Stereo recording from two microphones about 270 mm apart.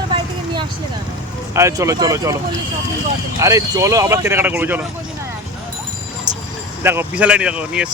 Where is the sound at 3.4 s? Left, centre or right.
Centre.